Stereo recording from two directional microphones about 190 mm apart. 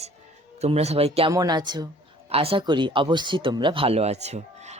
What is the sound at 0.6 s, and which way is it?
Speech, 35° right (ahead or behind).